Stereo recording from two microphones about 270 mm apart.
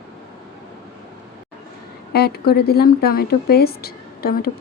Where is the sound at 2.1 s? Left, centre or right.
Left.